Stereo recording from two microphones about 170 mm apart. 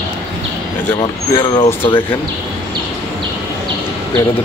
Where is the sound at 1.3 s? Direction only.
35° left (ahead or behind).